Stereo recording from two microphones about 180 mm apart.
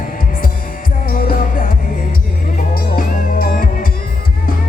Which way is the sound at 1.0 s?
55° left (ahead or behind).